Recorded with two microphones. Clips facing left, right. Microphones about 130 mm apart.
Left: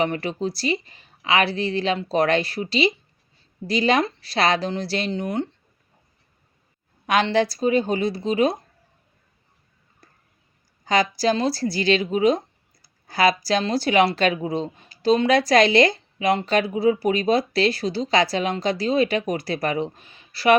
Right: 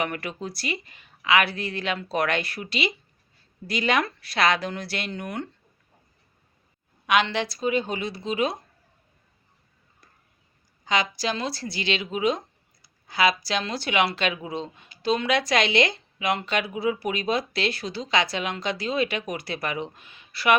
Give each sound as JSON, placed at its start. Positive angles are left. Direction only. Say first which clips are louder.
{"t": 0.0, "sound": "speech", "louder": "left 6 dB", "side_deg": 30}
{"t": 7.1, "sound": "speech", "louder": "left 4 dB", "side_deg": 40}
{"t": 10.8, "sound": "speech", "louder": "left 6 dB", "side_deg": 40}